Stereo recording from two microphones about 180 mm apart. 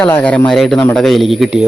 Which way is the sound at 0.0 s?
10° left (ahead or behind).